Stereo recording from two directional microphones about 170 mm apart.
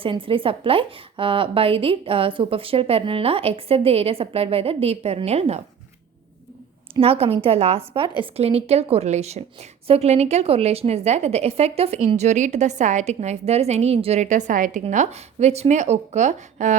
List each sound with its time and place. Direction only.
0.0 s a woman's voice: 30° right (ahead or behind)
6.9 s a woman's voice: 35° right (ahead or behind)